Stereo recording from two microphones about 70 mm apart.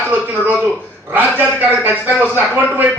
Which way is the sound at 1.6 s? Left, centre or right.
Right.